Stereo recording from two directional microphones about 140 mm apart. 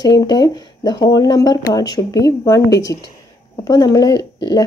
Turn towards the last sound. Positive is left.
turn(degrees=30)  # may be behind; listen again after turning